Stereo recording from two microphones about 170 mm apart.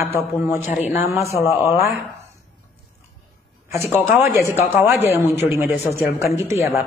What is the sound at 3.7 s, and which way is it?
Speech, 15° right (ahead or behind).